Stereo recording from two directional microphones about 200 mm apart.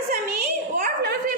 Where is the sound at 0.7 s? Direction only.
45° right (ahead or behind).